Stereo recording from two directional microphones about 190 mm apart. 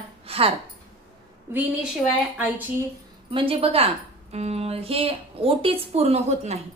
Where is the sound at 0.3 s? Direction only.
30° right (ahead or behind).